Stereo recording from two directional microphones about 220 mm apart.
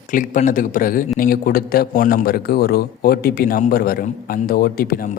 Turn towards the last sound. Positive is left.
turn(degrees=40)  # may be behind; listen again after turning